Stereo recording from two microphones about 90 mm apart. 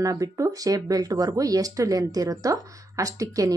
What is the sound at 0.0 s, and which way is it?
Speech, 40° right (ahead or behind).